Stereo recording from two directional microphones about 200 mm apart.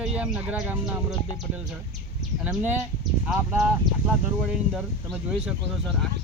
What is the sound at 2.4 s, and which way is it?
Speech, 10° right (ahead or behind).